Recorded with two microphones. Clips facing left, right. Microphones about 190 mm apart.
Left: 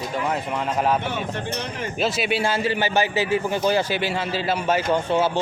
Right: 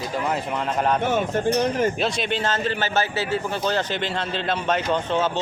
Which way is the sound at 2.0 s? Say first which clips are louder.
Left 2 dB; 5° left (ahead or behind).